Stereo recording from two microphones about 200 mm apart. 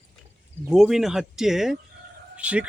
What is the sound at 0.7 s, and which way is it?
Speech, centre (ahead or behind).